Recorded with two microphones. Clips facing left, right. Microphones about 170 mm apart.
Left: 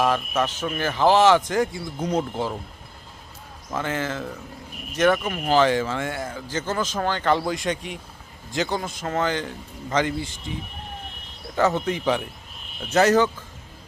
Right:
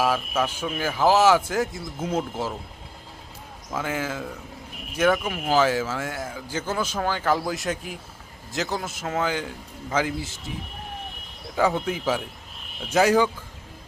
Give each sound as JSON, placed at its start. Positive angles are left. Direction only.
{"t": 0.0, "sound": "speech", "side_deg": -10}
{"t": 3.7, "sound": "speech", "side_deg": -5}